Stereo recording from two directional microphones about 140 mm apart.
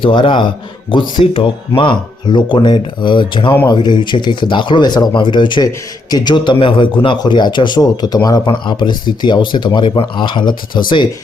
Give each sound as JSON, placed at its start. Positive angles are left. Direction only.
{"t": 0.0, "sound": "speech", "side_deg": 35}